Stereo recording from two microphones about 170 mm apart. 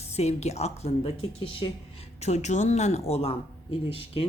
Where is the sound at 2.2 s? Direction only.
45° left (ahead or behind).